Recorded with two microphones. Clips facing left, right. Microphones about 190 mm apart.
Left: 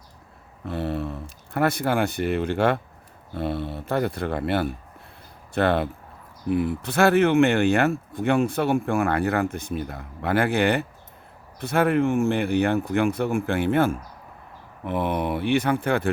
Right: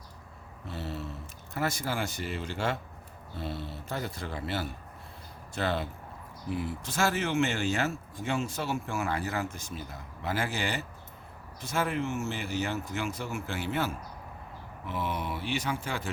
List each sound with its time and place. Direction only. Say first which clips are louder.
0.7 s speech: left 10 dB; 60° left (ahead or behind)